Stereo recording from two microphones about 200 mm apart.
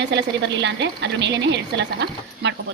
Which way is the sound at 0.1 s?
60° right (ahead or behind).